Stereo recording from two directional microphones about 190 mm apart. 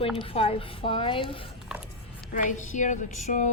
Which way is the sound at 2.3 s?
40° left (ahead or behind).